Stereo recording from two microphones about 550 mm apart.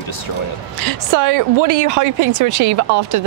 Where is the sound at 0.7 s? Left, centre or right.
Right.